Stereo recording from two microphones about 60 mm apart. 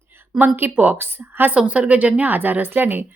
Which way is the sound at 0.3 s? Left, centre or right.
Right.